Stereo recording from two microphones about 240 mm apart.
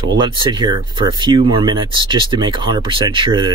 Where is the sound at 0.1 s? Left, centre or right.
Centre.